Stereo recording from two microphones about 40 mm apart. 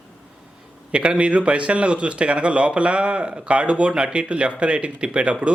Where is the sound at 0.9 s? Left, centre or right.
Right.